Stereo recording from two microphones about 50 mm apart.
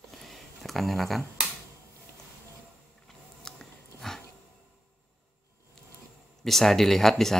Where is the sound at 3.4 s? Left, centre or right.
Centre.